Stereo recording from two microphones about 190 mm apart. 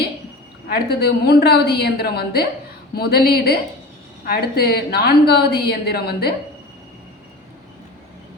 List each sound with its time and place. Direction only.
0.7 s a woman's voice: 55° left (ahead or behind)